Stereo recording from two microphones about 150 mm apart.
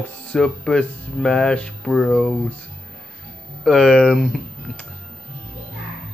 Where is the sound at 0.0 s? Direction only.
5° left (ahead or behind).